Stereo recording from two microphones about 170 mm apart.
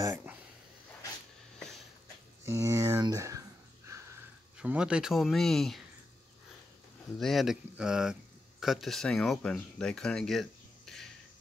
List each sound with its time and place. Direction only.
2.4 s a sound: 15° right (ahead or behind)
4.6 s speech: 5° right (ahead or behind)
7.2 s speech: centre (ahead or behind)